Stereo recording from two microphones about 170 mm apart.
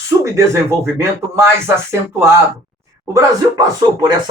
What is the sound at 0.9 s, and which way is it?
Speech, 15° right (ahead or behind).